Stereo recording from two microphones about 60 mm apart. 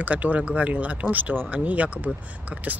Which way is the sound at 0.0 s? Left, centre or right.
Right.